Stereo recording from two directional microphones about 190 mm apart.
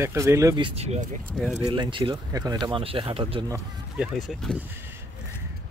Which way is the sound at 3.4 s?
15° right (ahead or behind).